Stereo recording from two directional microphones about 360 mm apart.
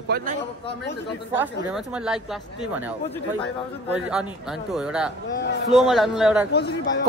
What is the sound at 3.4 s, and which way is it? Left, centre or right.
Speech, centre.